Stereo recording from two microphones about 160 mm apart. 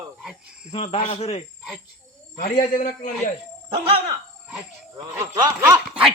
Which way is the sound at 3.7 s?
35° right (ahead or behind).